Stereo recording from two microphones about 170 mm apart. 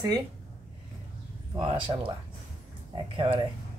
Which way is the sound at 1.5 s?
30° right (ahead or behind).